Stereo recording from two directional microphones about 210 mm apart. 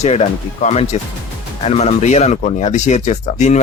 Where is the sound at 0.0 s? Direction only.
30° left (ahead or behind).